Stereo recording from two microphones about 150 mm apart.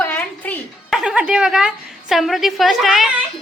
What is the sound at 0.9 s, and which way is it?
A woman's voice, 5° right (ahead or behind).